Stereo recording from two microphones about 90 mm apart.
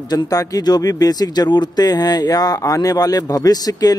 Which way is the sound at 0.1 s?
45° left (ahead or behind).